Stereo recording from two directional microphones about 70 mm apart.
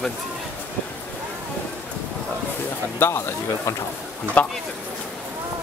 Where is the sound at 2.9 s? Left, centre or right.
Left.